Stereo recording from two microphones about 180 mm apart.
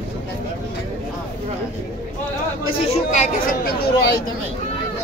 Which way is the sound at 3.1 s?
40° left (ahead or behind).